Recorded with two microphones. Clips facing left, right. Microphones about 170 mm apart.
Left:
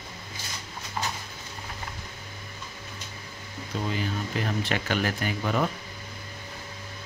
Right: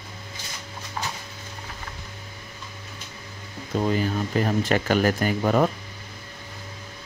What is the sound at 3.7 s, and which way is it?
Speech, 45° right (ahead or behind).